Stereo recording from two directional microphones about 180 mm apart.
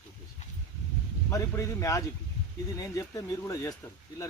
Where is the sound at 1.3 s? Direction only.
15° left (ahead or behind).